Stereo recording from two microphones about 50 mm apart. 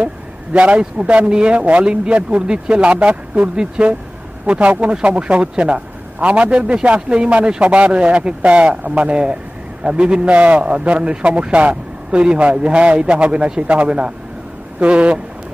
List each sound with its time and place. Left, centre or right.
0.0 s a man's voice: right